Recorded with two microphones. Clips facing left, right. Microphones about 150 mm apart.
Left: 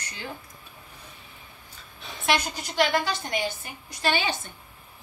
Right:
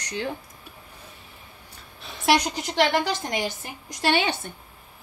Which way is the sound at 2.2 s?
90° right.